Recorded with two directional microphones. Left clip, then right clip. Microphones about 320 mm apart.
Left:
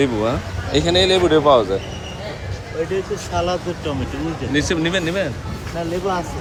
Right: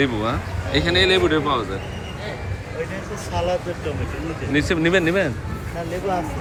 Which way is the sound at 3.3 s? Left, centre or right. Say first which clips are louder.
Left 1 dB; left.